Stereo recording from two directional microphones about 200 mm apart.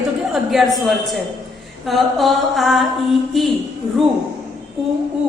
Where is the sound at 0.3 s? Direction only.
Centre (ahead or behind).